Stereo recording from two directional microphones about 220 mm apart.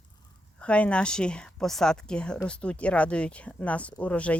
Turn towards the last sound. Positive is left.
turn(degrees=5)  # may be behind; listen again after turning